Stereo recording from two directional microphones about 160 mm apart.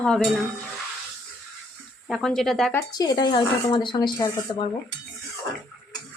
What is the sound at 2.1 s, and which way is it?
Speech, 5° left (ahead or behind).